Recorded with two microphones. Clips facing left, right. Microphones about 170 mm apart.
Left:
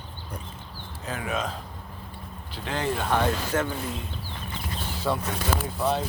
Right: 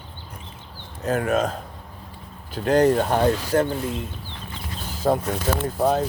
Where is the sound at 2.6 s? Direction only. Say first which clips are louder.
Right 10 dB; 45° right (ahead or behind).